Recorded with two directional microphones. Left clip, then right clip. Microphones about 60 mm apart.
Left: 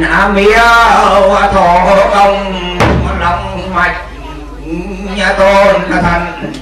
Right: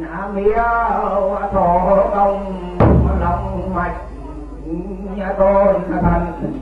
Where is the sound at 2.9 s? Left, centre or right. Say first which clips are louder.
Left 4 dB; centre.